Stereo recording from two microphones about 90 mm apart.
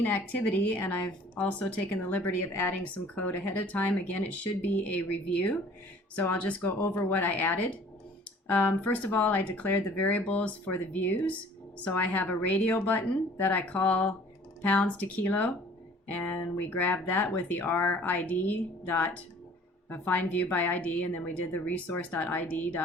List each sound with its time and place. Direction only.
0.0 s speech: 20° left (ahead or behind)